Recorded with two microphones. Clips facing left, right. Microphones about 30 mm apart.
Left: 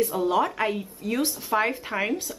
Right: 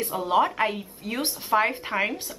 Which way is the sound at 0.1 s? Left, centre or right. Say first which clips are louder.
Right 1 dB; centre.